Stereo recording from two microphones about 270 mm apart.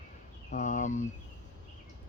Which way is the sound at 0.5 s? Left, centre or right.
Left.